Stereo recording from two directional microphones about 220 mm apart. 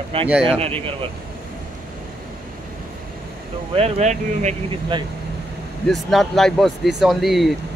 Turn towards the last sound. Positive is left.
turn(degrees=0)  # may be behind; listen again after turning